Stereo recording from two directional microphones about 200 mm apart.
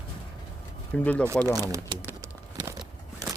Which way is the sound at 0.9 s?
5° left (ahead or behind).